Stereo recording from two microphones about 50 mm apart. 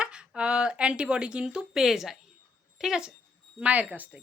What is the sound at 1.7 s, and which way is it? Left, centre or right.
A woman's voice, centre.